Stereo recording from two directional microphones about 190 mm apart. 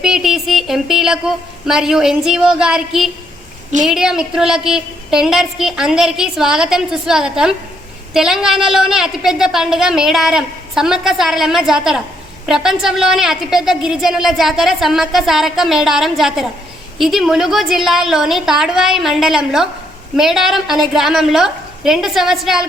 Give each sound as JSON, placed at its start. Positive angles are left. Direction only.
{"t": 0.0, "sound": "a woman's voice", "side_deg": 0}